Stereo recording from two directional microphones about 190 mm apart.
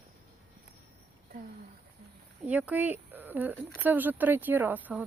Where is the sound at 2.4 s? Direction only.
10° right (ahead or behind).